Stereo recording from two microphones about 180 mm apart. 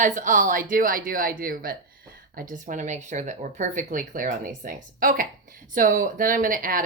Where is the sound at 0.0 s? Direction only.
45° right (ahead or behind).